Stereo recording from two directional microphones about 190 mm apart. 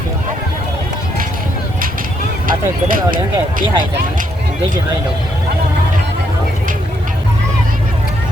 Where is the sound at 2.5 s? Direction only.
45° right (ahead or behind).